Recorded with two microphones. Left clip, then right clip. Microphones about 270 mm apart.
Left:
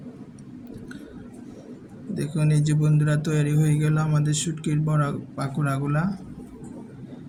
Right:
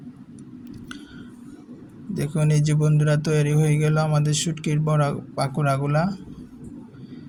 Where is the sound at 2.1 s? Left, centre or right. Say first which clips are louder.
Right 2 dB; right.